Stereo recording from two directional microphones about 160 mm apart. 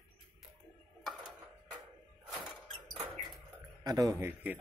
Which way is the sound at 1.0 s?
5° right (ahead or behind).